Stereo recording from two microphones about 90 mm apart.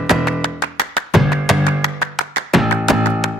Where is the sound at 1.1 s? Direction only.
Centre (ahead or behind).